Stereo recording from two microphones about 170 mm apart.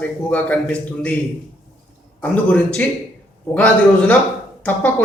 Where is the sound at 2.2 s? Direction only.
10° left (ahead or behind).